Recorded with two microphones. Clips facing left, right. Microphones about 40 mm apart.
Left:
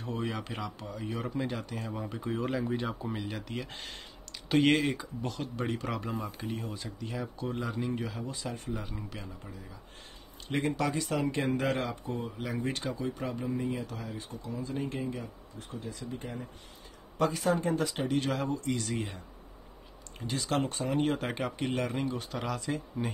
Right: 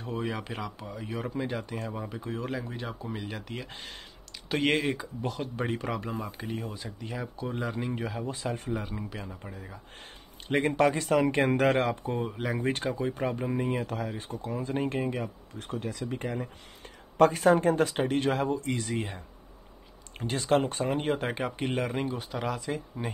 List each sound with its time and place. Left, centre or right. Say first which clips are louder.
0.0 s speech: right 2 dB; centre
5.9 s speech: right 2 dB; centre; by 8.8 s right
8.8 s speech: right 4 dB; centre
9.4 s speech: right 4 dB; right
10.8 s speech: right 7 dB; right
15.6 s speech: right 6 dB; right
17.2 s speech: right 7 dB; right
20.2 s speech: right 5 dB; right
21.0 s speech: right 1 dB; centre